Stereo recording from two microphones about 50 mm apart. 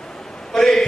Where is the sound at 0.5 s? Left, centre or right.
Centre.